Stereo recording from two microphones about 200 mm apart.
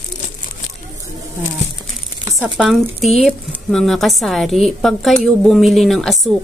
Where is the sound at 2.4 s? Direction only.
Centre (ahead or behind).